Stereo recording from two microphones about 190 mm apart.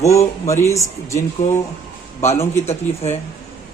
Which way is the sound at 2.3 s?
15° left (ahead or behind).